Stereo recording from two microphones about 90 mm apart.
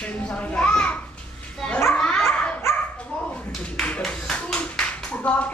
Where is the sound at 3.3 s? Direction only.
10° left (ahead or behind).